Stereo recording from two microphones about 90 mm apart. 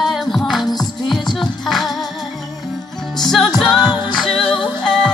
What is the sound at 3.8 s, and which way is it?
Music, 50° left (ahead or behind).